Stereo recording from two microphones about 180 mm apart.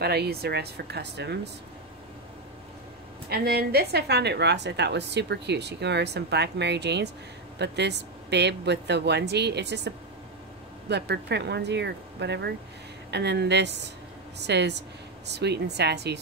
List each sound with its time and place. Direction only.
0.0 s speech: 65° right (ahead or behind)
3.3 s a woman's voice: 60° right (ahead or behind)